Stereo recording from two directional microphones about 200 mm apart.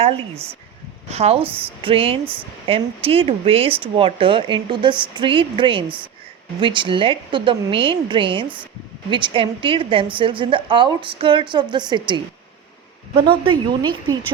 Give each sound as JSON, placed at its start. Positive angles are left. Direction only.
{"t": 1.1, "sound": "speech", "side_deg": -30}